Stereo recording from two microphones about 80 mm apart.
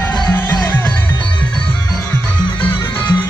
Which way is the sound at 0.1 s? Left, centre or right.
Left.